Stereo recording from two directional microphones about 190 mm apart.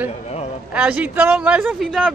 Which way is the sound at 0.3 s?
35° left (ahead or behind).